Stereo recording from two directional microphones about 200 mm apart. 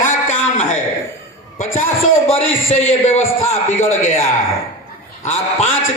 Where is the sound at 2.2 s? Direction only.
30° left (ahead or behind).